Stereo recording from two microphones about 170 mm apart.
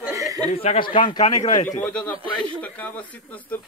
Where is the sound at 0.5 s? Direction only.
35° left (ahead or behind).